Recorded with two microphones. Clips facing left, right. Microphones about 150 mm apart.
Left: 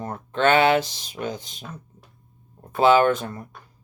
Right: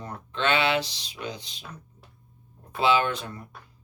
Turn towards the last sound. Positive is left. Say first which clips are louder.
# left 7 dB
turn(degrees=45)  # may be behind; listen again after turning